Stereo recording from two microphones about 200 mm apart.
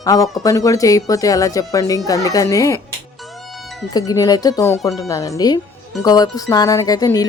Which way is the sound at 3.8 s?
20° left (ahead or behind).